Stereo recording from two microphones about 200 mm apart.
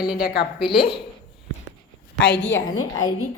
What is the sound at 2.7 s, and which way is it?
Speech, 85° left.